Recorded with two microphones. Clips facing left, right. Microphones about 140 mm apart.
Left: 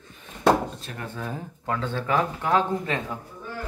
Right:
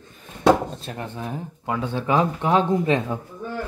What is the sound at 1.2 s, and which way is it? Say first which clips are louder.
Speech: right 2 dB; 15° right (ahead or behind).